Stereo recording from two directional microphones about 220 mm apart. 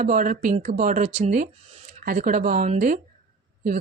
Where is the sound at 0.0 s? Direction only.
35° right (ahead or behind).